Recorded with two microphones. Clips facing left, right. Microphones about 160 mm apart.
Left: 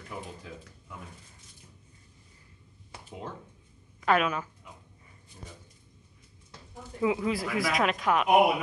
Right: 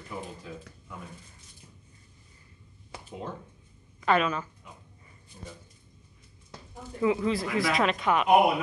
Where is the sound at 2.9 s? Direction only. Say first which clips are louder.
Right 4 dB; 90° right.